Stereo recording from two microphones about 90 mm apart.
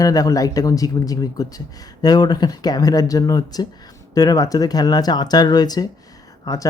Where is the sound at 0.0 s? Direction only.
40° left (ahead or behind).